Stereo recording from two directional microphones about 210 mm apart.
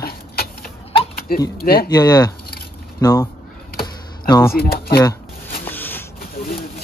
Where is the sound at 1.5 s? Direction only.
45° left (ahead or behind).